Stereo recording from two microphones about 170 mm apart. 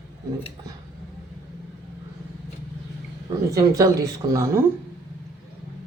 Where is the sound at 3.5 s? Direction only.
20° right (ahead or behind).